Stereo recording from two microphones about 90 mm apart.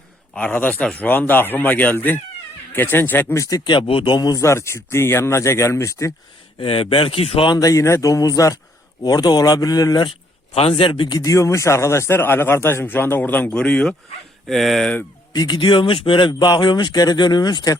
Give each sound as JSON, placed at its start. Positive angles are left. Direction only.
{"t": 0.3, "sound": "a man's voice", "side_deg": 15}
{"t": 3.3, "sound": "speech", "side_deg": 35}
{"t": 3.6, "sound": "speech", "side_deg": 55}
{"t": 3.8, "sound": "speech", "side_deg": 70}
{"t": 4.4, "sound": "speech", "side_deg": 30}
{"t": 6.6, "sound": "speech", "side_deg": 80}
{"t": 7.5, "sound": "speech", "side_deg": 40}
{"t": 10.1, "sound": "a man's voice", "side_deg": 90}
{"t": 11.2, "sound": "speech", "side_deg": 35}
{"t": 14.4, "sound": "speech", "side_deg": 0}
{"t": 15.3, "sound": "speech", "side_deg": 50}